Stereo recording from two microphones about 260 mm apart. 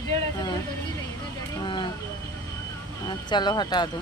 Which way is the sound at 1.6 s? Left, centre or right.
Centre.